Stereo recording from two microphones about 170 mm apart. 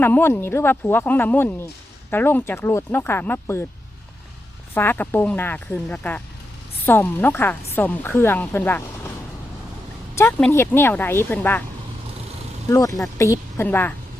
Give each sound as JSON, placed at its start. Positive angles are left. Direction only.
{"t": 0.0, "sound": "a woman's voice", "side_deg": 15}
{"t": 4.7, "sound": "a woman's voice", "side_deg": 10}
{"t": 10.2, "sound": "a woman's voice", "side_deg": 15}
{"t": 12.6, "sound": "a woman's voice", "side_deg": 20}